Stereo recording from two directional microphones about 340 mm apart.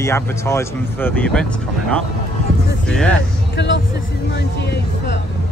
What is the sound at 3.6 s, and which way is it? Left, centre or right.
Speech, left.